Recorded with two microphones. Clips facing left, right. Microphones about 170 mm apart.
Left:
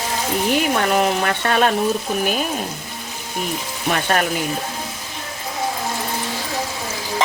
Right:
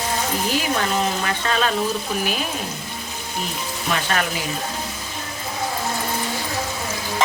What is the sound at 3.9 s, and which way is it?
Speech, 50° left (ahead or behind).